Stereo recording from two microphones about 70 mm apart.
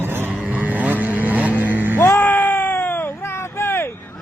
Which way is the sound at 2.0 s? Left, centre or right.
Left.